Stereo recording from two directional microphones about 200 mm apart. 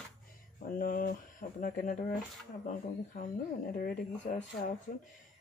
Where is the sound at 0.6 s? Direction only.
45° left (ahead or behind).